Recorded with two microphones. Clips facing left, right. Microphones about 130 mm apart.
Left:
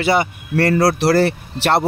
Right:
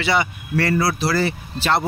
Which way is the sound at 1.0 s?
70° left (ahead or behind).